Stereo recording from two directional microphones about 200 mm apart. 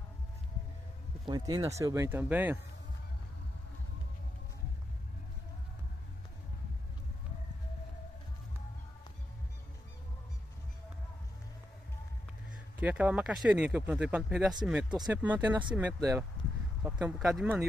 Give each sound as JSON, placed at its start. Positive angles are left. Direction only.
{"t": 1.2, "sound": "speech", "side_deg": -20}
{"t": 12.8, "sound": "speech", "side_deg": -5}
{"t": 16.8, "sound": "speech", "side_deg": -5}